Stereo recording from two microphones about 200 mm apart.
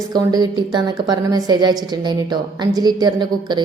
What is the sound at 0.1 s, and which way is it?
A woman's voice, 20° right (ahead or behind).